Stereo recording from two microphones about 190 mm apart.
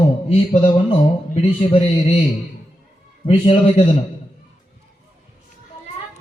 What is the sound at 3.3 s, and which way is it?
Mantra, 30° left (ahead or behind).